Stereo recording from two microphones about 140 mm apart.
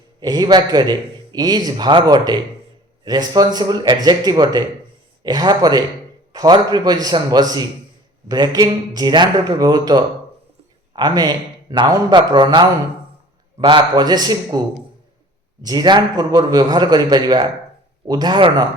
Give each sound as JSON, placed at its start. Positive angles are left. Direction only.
{"t": 0.2, "sound": "a man's voice", "side_deg": -30}
{"t": 15.6, "sound": "a man's voice", "side_deg": -30}